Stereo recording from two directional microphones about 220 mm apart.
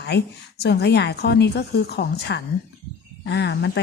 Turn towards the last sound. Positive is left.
turn(degrees=50)  # may be behind; listen again after turning